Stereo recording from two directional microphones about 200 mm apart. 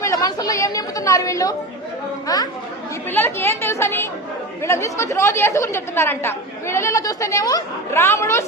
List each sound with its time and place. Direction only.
0.0 s a woman's voice: 15° left (ahead or behind)